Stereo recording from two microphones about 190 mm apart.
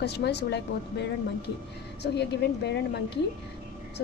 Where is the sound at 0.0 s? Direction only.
60° left (ahead or behind).